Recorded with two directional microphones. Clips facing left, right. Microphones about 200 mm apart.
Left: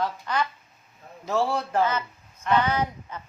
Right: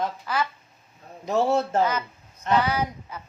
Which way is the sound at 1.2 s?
20° right (ahead or behind).